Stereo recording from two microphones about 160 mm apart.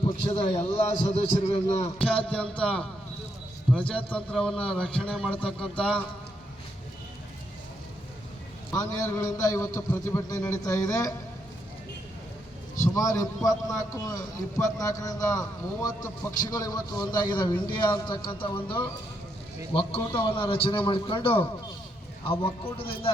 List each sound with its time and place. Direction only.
0.3 s a man's voice: 40° left (ahead or behind)
2.3 s a man's voice: 5° left (ahead or behind)
8.7 s a man's voice: 20° left (ahead or behind)
12.9 s a man's voice: 20° left (ahead or behind)
20.1 s a man's voice: 35° left (ahead or behind)